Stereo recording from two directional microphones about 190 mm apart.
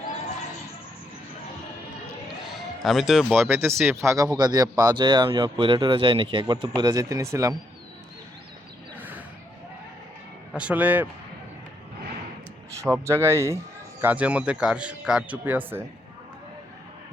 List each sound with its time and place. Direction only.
2.8 s speech: centre (ahead or behind)
3.5 s a man's voice: 15° right (ahead or behind)
9.0 s a sound: 10° right (ahead or behind)
10.5 s a man's voice: 5° right (ahead or behind)
12.8 s a man's voice: 15° right (ahead or behind)